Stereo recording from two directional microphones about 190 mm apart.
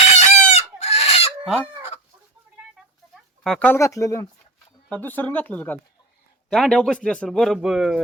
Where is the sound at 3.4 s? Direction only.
10° left (ahead or behind).